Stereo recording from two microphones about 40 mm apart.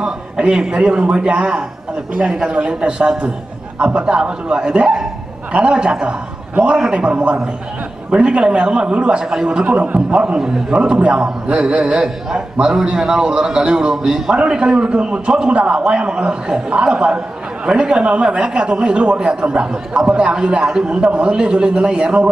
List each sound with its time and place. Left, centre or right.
0.4 s a man's voice: right
10.8 s a man's voice: right